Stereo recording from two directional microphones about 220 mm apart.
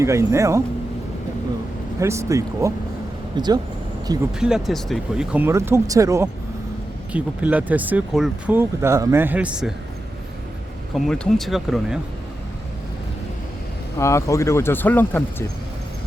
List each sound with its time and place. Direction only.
0.0 s speech: 15° right (ahead or behind)
2.0 s speech: 15° right (ahead or behind)
4.4 s speech: 5° right (ahead or behind)
10.9 s speech: centre (ahead or behind)
14.0 s speech: 15° left (ahead or behind)